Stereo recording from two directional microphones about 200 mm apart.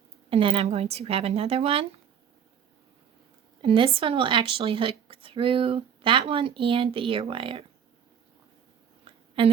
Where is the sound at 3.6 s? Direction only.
25° right (ahead or behind).